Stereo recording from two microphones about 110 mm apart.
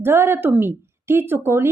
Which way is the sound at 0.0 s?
20° right (ahead or behind).